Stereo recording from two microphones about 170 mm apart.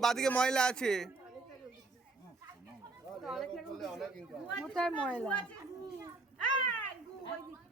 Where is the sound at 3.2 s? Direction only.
Centre (ahead or behind).